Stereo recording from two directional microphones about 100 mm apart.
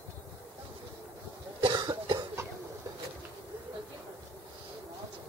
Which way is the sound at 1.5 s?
55° right (ahead or behind).